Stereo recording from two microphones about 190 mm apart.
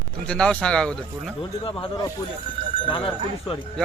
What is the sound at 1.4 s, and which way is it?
Speech, 25° left (ahead or behind).